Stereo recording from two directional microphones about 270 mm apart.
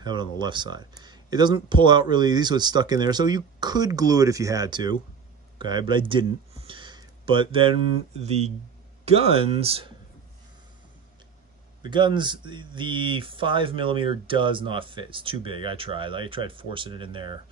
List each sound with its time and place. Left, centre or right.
0.0 s speech: centre
5.6 s a sound: centre
9.0 s speech: right
11.8 s speech: centre